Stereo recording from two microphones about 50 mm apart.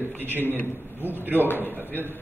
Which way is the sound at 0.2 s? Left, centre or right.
Right.